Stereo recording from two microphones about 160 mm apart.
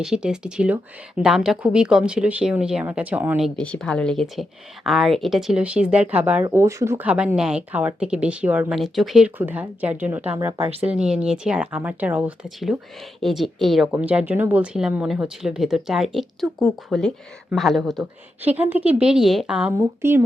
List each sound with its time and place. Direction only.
0.0 s speech: 5° right (ahead or behind)
10.6 s speech: 35° right (ahead or behind)
10.9 s speech: 5° right (ahead or behind)
18.4 s speech: 10° right (ahead or behind)